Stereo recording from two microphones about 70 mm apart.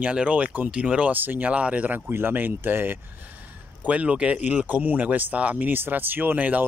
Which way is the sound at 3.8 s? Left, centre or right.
Centre.